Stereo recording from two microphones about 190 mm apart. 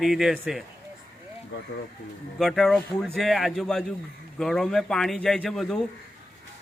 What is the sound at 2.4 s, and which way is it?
A man's voice, centre (ahead or behind).